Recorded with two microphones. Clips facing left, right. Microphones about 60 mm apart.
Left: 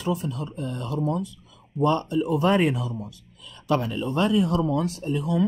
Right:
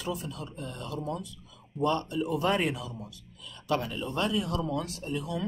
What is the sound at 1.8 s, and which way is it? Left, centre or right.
Speech, left.